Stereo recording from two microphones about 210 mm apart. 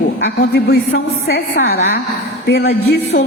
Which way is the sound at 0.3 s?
50° left (ahead or behind).